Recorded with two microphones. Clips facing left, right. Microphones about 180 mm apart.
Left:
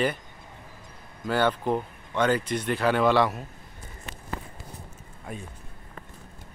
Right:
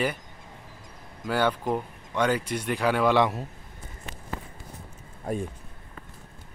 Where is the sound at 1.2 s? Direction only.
10° right (ahead or behind).